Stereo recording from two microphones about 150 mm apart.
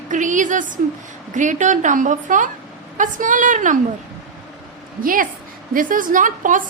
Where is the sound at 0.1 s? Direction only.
60° right (ahead or behind).